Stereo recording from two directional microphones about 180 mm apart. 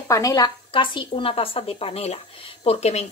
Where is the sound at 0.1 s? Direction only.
20° left (ahead or behind).